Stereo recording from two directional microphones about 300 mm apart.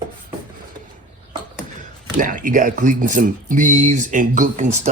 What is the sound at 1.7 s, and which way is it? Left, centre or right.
Speech, right.